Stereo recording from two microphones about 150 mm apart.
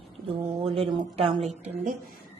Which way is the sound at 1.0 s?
40° right (ahead or behind).